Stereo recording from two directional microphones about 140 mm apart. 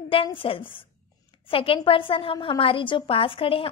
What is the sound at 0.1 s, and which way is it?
A woman's voice, 40° left (ahead or behind).